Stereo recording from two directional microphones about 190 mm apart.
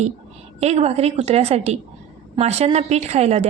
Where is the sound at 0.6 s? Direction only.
35° right (ahead or behind).